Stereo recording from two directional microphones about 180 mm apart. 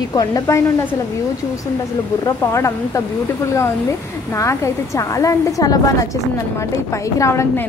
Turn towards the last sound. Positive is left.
turn(degrees=15)  # may be behind; listen again after turning